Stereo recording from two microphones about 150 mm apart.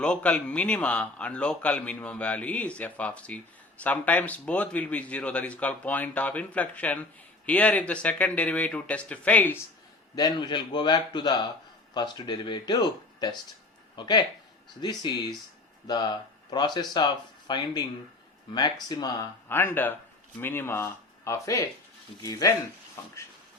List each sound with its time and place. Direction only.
0.0 s a man's voice: 5° left (ahead or behind)
10.2 s speech: 25° left (ahead or behind)
19.5 s a man's voice: 15° left (ahead or behind)